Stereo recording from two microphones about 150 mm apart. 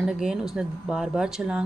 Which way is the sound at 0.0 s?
5° right (ahead or behind).